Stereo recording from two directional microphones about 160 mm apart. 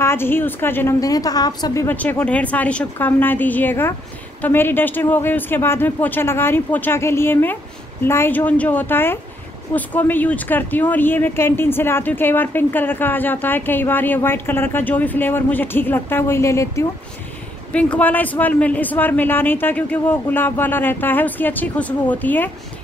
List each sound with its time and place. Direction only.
0.0 s speech: 15° left (ahead or behind)